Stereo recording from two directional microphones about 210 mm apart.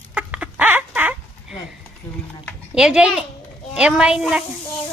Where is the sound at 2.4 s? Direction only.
5° right (ahead or behind).